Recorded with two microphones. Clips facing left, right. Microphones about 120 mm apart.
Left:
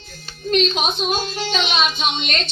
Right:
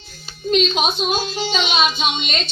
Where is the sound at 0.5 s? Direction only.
5° right (ahead or behind).